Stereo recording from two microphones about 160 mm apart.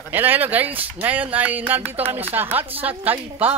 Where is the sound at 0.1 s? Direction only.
10° right (ahead or behind).